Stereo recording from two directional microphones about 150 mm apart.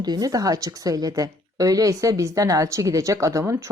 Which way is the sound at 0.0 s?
25° right (ahead or behind).